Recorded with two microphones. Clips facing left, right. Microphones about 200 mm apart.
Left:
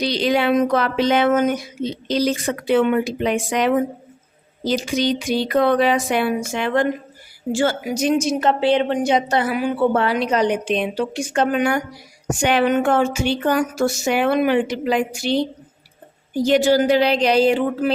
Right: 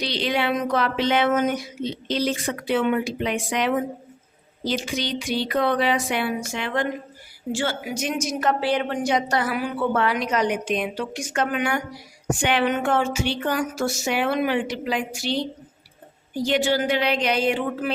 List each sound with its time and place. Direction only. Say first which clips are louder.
0.0 s a woman's voice: left 6 dB; 40° left (ahead or behind)
16.4 s a woman's voice: left 6 dB; 40° left (ahead or behind)